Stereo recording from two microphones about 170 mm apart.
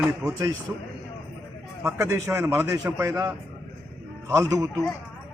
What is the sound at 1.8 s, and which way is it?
A man's voice, 15° right (ahead or behind).